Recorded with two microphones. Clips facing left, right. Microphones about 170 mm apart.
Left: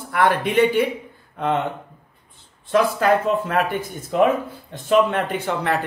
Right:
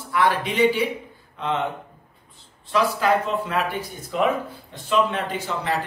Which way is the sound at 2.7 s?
50° left (ahead or behind).